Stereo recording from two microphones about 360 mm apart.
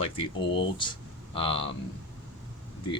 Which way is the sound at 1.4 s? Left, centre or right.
Centre.